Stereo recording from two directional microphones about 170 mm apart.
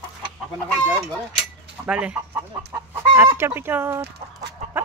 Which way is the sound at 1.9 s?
5° right (ahead or behind).